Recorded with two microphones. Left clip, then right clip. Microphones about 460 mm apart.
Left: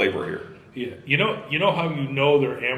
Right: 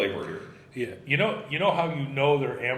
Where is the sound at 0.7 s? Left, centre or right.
Centre.